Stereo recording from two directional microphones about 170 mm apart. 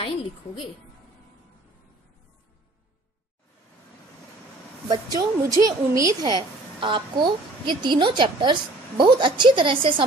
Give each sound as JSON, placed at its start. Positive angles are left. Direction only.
{"t": 0.0, "sound": "a woman's voice", "side_deg": 30}
{"t": 4.8, "sound": "a woman's voice", "side_deg": -25}